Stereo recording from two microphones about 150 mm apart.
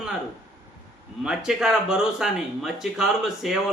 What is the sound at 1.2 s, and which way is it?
Speech, 5° right (ahead or behind).